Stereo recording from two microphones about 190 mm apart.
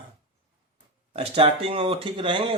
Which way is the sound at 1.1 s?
30° right (ahead or behind).